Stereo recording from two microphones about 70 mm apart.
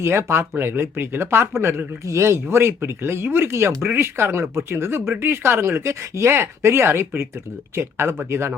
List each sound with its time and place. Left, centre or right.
0.0 s speech: right